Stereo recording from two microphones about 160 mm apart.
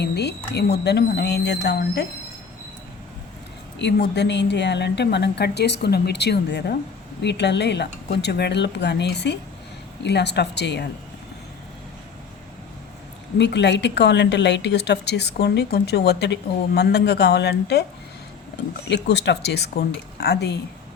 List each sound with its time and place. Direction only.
0.0 s a woman's voice: 90° left
3.8 s a woman's voice: 90° left
13.4 s a woman's voice: 90° left
18.9 s a woman's voice: 90° left